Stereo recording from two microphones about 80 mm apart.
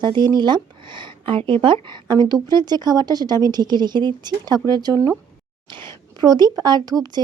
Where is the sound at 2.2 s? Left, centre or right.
Right.